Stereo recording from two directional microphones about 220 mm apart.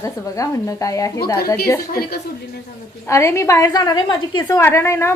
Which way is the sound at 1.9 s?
45° left (ahead or behind).